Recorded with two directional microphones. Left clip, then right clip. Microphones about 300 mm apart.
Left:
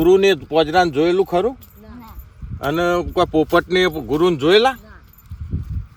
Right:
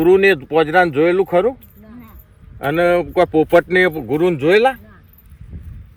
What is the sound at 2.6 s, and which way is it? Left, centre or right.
Speech, centre.